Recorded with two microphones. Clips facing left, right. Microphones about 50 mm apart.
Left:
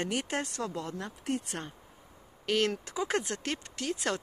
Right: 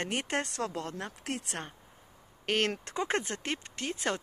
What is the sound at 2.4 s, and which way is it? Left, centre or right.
Speech, right.